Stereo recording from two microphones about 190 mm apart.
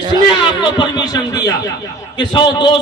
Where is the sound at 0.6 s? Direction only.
20° left (ahead or behind).